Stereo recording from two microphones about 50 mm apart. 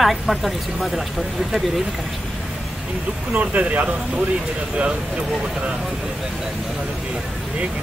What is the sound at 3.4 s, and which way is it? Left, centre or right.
Speech, right.